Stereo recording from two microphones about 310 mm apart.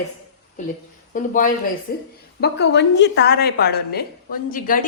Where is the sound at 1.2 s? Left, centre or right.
Left.